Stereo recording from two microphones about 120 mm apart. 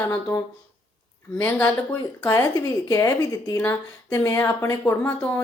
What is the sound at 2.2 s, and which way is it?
Speech, 25° left (ahead or behind).